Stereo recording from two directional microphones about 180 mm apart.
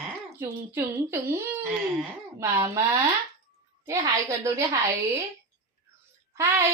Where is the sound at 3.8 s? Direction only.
15° right (ahead or behind).